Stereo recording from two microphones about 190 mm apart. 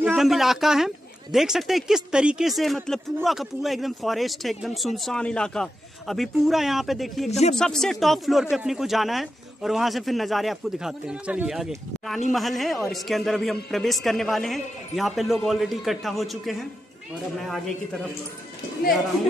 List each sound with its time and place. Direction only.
0.0 s speech: centre (ahead or behind)
7.2 s speech: 35° left (ahead or behind)
7.5 s speech: centre (ahead or behind)